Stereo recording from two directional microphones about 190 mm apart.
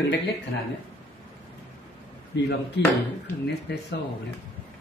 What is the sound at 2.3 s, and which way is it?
Speech, 65° left (ahead or behind).